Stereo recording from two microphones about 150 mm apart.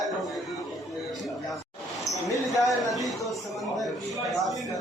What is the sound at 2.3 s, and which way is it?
Speech, 20° left (ahead or behind).